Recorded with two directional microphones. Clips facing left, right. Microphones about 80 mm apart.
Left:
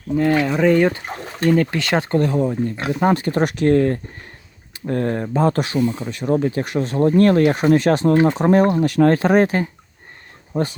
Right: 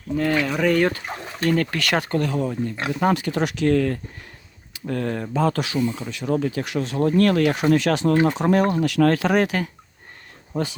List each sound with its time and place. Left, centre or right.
0.2 s speech: centre; by 5.8 s left
5.8 s speech: left
6.1 s speech: left